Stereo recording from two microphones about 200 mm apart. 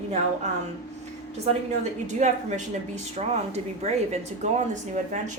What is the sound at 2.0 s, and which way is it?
Speech, 35° right (ahead or behind).